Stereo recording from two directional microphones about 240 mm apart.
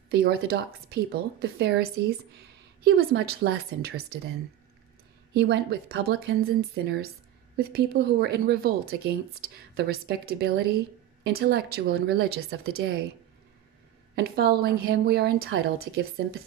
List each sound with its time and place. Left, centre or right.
0.1 s speech: right
5.3 s speech: right
14.1 s speech: right